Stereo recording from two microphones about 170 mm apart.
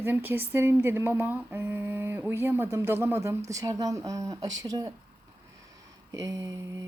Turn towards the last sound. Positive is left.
turn(degrees=-20)  # may be behind; listen again after turning